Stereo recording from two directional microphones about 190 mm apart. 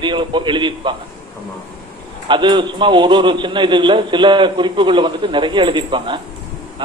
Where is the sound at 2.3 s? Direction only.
25° right (ahead or behind).